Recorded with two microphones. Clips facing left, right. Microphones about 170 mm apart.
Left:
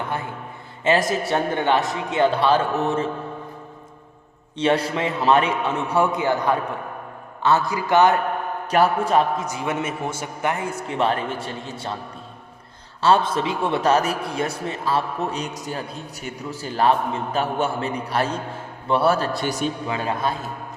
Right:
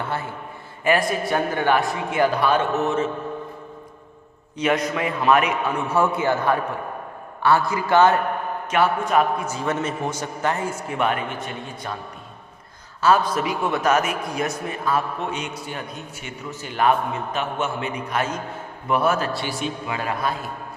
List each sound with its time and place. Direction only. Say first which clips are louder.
0.0 s a man's voice: even; 15° left (ahead or behind); by 3.1 s 35° left (ahead or behind)
4.5 s a man's voice: left 1 dB; 30° left (ahead or behind)
5.9 s a man's voice: even; 15° left (ahead or behind)
8.7 s a man's voice: left 2 dB; 35° left (ahead or behind)
9.5 s a man's voice: right 1 dB; 15° left (ahead or behind)
10.8 s a man's voice: left 2 dB; 30° left (ahead or behind)
13.0 s a man's voice: even; 30° left (ahead or behind)
20.0 s a man's voice: right 1 dB; 25° left (ahead or behind)